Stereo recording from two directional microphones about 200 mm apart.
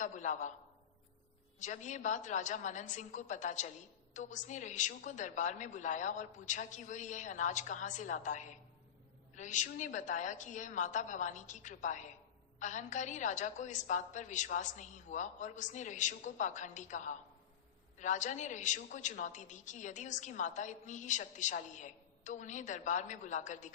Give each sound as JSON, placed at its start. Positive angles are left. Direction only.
{"t": 0.0, "sound": "a woman's voice", "side_deg": 40}
{"t": 1.5, "sound": "a woman's voice", "side_deg": 40}